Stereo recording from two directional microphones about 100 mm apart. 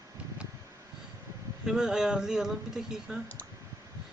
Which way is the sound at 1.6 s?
5° right (ahead or behind).